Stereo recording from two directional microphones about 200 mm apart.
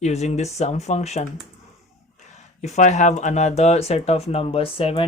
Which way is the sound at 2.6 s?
35° left (ahead or behind).